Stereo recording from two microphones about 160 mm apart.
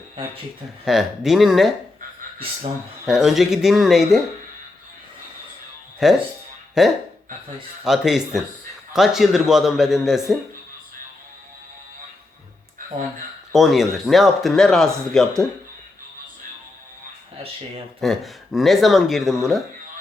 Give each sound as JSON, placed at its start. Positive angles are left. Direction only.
{"t": 0.9, "sound": "speech", "side_deg": 0}
{"t": 3.1, "sound": "speech", "side_deg": -5}
{"t": 6.0, "sound": "speech", "side_deg": 0}
{"t": 13.5, "sound": "speech", "side_deg": 0}
{"t": 17.3, "sound": "speech", "side_deg": -35}
{"t": 18.0, "sound": "speech", "side_deg": 0}